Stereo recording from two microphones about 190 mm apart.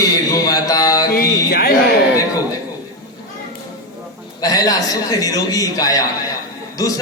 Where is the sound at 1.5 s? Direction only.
55° left (ahead or behind).